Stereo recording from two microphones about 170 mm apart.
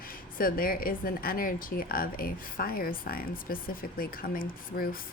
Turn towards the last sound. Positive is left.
turn(degrees=60)  # may be behind; listen again after turning